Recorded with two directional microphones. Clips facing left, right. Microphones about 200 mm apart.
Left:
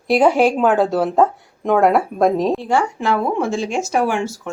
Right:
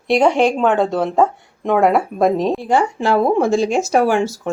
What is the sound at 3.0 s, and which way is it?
Speech, 35° right (ahead or behind).